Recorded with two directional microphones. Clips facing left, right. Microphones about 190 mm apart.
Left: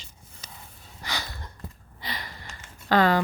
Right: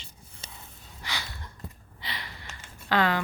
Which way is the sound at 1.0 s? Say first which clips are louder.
Left 3 dB; 40° left (ahead or behind).